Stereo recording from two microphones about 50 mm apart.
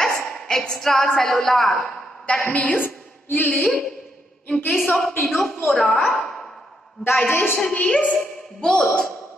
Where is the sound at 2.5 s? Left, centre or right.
Left.